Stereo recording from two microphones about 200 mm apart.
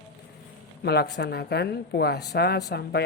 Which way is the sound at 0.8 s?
55° left (ahead or behind).